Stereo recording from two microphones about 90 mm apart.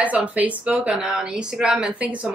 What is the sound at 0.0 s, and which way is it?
Speech, 15° right (ahead or behind).